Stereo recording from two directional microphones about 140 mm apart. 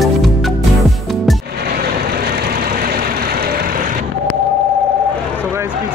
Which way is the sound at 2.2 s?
90° right.